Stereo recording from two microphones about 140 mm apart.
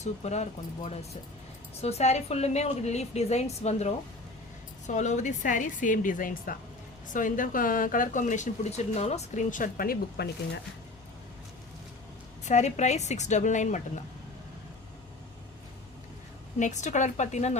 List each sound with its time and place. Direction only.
0.0 s a woman's voice: 55° left (ahead or behind)
1.8 s a woman's voice: 50° left (ahead or behind); by 6.6 s 85° left
7.1 s speech: 70° left (ahead or behind); by 10.0 s 90° left
12.5 s a woman's voice: 55° left (ahead or behind)
16.6 s a woman's voice: 60° left (ahead or behind)